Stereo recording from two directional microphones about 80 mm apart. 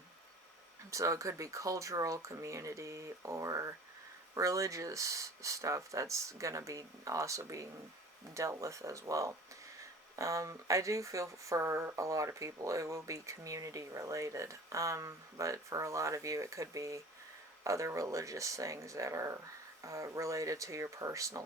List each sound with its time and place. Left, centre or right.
0.9 s speech: right